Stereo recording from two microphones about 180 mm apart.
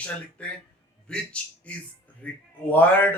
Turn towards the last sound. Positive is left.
turn(degrees=10)  # may be behind; listen again after turning